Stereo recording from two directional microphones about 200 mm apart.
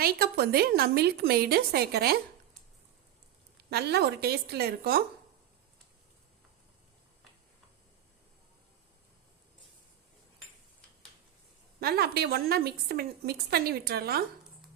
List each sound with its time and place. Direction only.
0.0 s a woman's voice: 50° right (ahead or behind)
3.7 s a woman's voice: 55° right (ahead or behind)
11.8 s a woman's voice: 50° right (ahead or behind)